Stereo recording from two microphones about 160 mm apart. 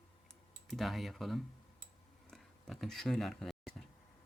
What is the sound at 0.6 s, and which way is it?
Speech, centre (ahead or behind).